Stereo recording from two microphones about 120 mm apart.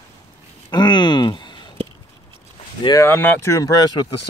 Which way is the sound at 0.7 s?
40° left (ahead or behind).